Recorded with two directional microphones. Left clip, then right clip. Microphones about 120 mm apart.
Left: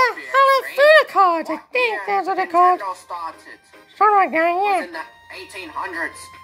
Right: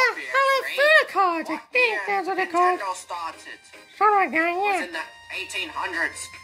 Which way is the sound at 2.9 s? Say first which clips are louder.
Left 2 dB; 5° right (ahead or behind).